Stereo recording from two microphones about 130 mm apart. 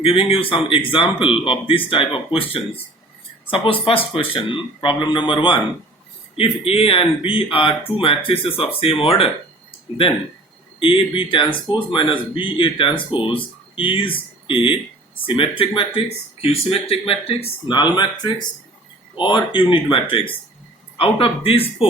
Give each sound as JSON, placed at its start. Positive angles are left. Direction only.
{"t": 0.0, "sound": "speech", "side_deg": 45}
{"t": 10.8, "sound": "speech", "side_deg": 40}